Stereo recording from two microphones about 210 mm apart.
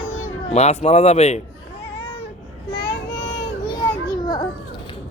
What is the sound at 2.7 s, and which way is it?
Child singing, 50° left (ahead or behind).